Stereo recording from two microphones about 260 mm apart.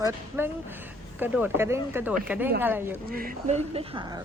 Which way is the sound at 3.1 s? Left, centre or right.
Right.